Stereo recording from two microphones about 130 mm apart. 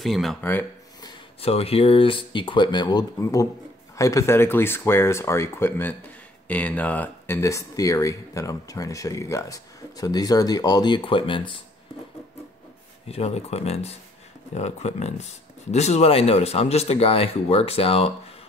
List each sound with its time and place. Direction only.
0.0 s speech: centre (ahead or behind)
0.4 s speech: 15° left (ahead or behind)
1.4 s speech: 50° left (ahead or behind)
13.1 s speech: 50° left (ahead or behind)